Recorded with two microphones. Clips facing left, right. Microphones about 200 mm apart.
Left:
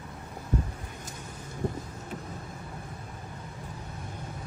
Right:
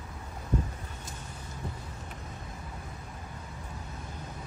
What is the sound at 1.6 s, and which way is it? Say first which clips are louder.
Vehicle: left 10 dB; 45° left (ahead or behind).